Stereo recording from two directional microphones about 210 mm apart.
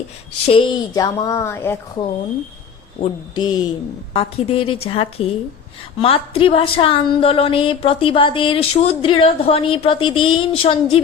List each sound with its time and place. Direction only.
0.4 s speech: 25° left (ahead or behind)
3.0 s a woman's voice: 20° left (ahead or behind)